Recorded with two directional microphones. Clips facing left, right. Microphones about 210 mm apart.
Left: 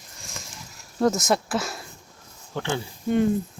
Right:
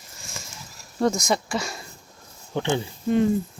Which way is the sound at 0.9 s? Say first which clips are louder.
Left 1 dB; centre (ahead or behind).